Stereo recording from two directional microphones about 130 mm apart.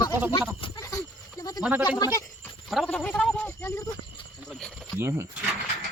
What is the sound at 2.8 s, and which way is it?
Speech, 10° left (ahead or behind).